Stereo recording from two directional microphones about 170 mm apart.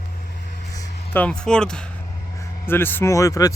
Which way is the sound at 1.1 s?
5° left (ahead or behind).